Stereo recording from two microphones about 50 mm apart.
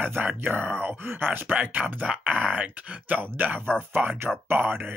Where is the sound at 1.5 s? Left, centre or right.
Right.